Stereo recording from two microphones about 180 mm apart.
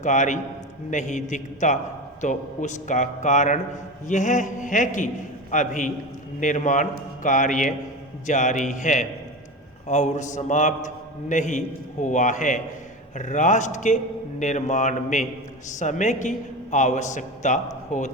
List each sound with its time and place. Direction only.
0.0 s a man's voice: 40° left (ahead or behind)